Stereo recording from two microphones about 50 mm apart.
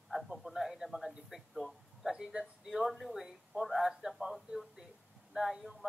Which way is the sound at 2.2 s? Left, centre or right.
Centre.